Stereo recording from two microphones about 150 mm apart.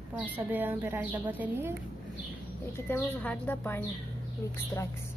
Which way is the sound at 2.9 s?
10° left (ahead or behind).